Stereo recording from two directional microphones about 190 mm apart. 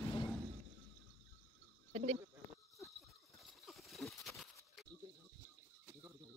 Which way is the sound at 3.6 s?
Centre (ahead or behind).